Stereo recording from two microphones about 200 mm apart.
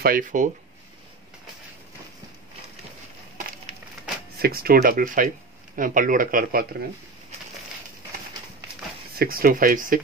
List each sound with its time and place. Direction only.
0.0 s speech: 45° right (ahead or behind)
4.4 s speech: 50° right (ahead or behind)
9.2 s speech: 45° right (ahead or behind)